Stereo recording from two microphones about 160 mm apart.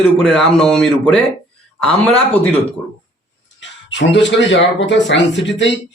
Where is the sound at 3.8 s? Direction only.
90° left.